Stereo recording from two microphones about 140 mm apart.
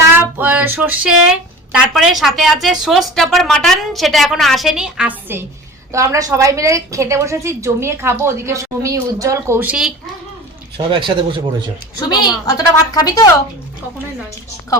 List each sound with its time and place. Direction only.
0.1 s speech: 15° right (ahead or behind)
5.9 s a woman's voice: 20° right (ahead or behind)
10.8 s speech: 35° right (ahead or behind)
11.9 s a woman's voice: 30° left (ahead or behind)